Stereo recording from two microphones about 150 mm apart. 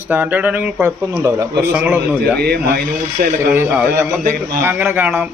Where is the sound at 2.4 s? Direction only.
90° right.